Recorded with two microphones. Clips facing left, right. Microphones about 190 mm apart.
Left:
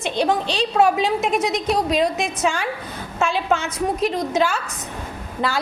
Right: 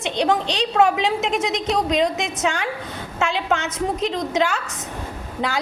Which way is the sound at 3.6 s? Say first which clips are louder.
Left 1 dB; 20° right (ahead or behind).